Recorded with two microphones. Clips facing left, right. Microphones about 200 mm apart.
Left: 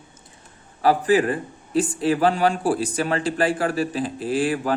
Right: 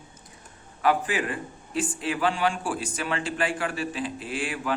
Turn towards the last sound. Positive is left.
turn(degrees=40)  # may be behind; listen again after turning